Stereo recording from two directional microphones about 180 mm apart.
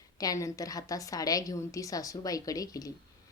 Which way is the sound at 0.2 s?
20° left (ahead or behind).